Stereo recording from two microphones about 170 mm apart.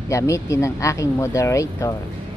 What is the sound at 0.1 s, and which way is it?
Speech, 20° left (ahead or behind).